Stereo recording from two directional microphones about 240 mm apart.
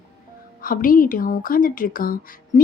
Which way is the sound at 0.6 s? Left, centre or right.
Left.